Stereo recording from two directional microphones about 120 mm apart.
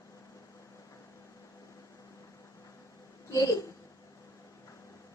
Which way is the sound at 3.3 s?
30° left (ahead or behind).